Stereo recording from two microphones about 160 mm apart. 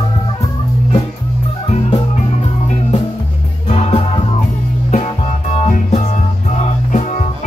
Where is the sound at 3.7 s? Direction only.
40° left (ahead or behind).